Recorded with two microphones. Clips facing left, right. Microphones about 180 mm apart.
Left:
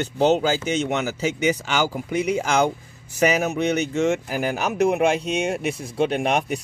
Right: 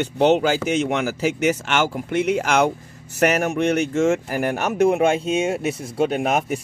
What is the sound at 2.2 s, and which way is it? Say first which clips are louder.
Speech: right 2 dB; 85° right.